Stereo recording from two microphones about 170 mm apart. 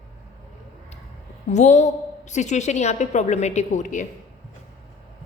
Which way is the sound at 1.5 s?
45° left (ahead or behind).